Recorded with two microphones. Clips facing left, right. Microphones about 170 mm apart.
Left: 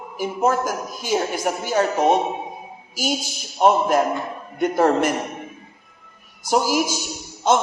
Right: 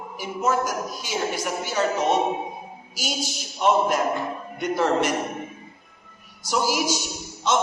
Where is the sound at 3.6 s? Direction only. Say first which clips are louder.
Left 4 dB; 45° left (ahead or behind).